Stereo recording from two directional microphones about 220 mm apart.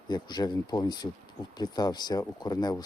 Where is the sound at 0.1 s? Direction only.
20° left (ahead or behind).